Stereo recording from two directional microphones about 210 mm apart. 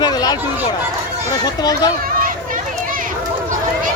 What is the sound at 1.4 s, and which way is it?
Speech, 20° left (ahead or behind).